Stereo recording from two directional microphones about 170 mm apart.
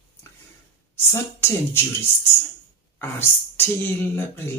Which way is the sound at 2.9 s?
15° left (ahead or behind).